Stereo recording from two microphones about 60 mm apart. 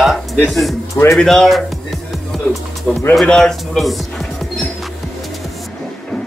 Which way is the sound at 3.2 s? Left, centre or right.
Centre.